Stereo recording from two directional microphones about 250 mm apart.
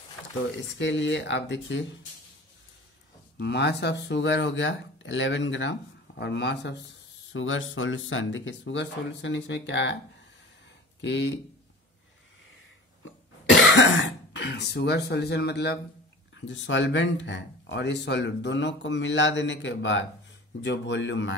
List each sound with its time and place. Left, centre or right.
0.7 s speech: left
3.3 s speech: left
11.0 s speech: left
13.5 s cough: left
16.3 s speech: left